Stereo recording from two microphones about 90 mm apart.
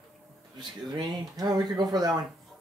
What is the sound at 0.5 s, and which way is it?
Speech, 50° right (ahead or behind).